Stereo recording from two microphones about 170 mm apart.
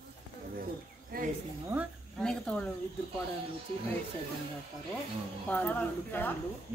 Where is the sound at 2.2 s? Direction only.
5° left (ahead or behind).